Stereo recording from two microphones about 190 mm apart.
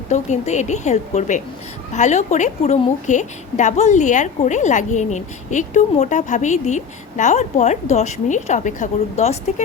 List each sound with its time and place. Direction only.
0.1 s a woman's voice: 40° left (ahead or behind)